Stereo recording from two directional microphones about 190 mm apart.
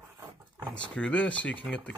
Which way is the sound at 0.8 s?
5° left (ahead or behind).